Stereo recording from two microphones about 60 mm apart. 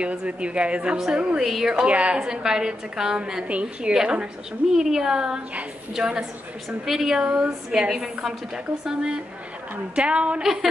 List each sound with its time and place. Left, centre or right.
0.0 s a woman's voice: centre
1.9 s a woman's voice: right
2.1 s a woman's voice: centre
10.4 s a woman's voice: centre